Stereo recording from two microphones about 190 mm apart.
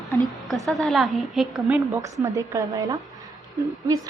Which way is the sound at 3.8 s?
15° right (ahead or behind).